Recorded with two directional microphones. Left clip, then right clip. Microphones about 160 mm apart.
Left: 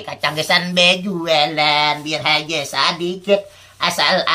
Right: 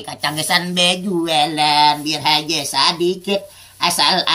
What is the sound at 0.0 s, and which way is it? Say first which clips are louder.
Mantra: left 1 dB; 30° left (ahead or behind).